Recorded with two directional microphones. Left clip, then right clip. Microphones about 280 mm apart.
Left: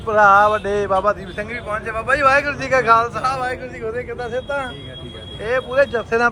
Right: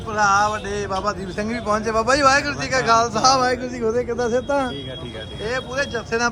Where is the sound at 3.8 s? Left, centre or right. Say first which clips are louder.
Right 5 dB; centre.